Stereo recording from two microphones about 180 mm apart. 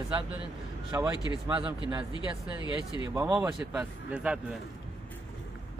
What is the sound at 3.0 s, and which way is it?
Speech, 15° right (ahead or behind).